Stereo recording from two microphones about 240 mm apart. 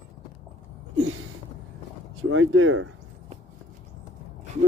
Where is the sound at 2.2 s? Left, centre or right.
Right.